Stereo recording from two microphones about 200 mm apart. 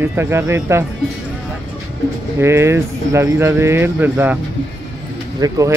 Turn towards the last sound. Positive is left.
turn(degrees=-15)  # may be behind; listen again after turning